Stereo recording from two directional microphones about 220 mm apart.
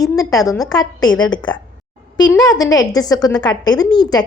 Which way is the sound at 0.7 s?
20° left (ahead or behind).